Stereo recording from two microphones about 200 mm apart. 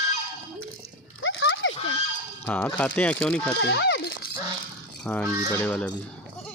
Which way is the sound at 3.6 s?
65° left (ahead or behind).